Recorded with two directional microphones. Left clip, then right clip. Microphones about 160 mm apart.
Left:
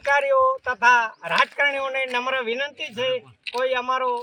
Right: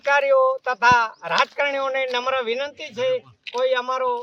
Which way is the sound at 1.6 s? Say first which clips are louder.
Even; centre (ahead or behind).